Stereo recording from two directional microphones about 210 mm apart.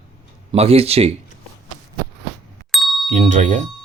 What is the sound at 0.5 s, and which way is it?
Speech, 30° right (ahead or behind).